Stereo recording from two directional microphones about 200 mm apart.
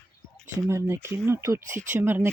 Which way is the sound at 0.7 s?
15° right (ahead or behind).